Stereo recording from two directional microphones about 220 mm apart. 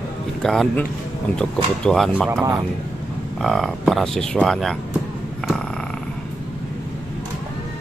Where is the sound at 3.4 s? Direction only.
Centre (ahead or behind).